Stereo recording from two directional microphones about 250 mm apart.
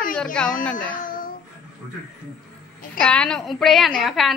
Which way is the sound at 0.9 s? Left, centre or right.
Left.